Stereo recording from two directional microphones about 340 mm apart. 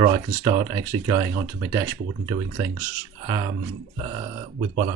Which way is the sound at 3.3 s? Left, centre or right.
Centre.